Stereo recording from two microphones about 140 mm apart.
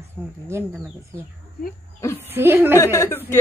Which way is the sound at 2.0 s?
20° left (ahead or behind).